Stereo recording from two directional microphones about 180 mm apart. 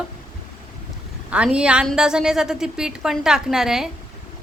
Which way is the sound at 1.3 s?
5° right (ahead or behind).